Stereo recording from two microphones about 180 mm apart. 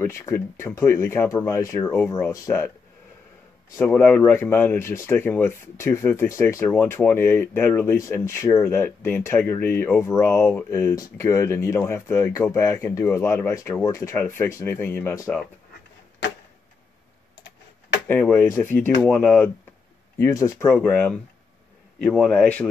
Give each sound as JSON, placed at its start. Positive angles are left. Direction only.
{"t": 0.0, "sound": "speech", "side_deg": 15}
{"t": 3.7, "sound": "speech", "side_deg": 10}
{"t": 17.4, "sound": "typing", "side_deg": 75}
{"t": 18.0, "sound": "speech", "side_deg": 10}
{"t": 20.2, "sound": "a man's voice", "side_deg": 20}